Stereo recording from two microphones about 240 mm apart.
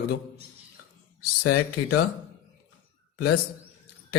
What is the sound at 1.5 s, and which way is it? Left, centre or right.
Speech, left.